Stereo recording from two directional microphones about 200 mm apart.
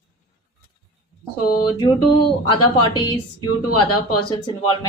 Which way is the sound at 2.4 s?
25° left (ahead or behind).